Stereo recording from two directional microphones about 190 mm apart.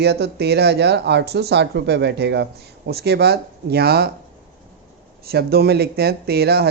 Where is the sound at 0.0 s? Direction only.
60° right (ahead or behind).